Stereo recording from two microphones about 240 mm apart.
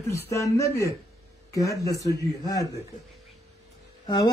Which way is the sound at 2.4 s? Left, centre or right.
Centre.